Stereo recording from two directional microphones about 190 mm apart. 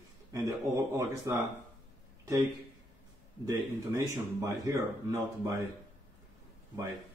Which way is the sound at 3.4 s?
15° right (ahead or behind).